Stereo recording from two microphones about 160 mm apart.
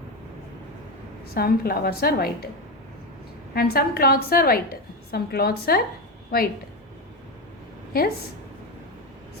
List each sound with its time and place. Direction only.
1.3 s a woman's voice: 70° left (ahead or behind)
3.5 s a woman's voice: 75° left (ahead or behind)